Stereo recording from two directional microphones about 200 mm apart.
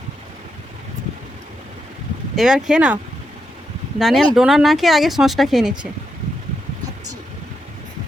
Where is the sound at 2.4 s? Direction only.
5° right (ahead or behind).